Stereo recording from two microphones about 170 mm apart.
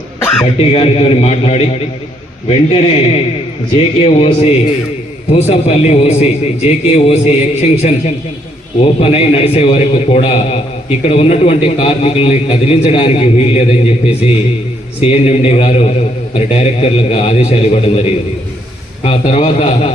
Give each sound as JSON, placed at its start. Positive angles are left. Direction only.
{"t": 0.6, "sound": "a man's voice", "side_deg": 35}
{"t": 15.0, "sound": "a man's voice", "side_deg": 35}